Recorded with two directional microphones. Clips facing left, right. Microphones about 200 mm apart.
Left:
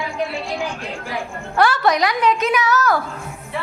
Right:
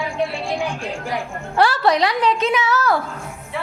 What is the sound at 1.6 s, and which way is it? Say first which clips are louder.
A woman's voice: even; 30° right (ahead or behind).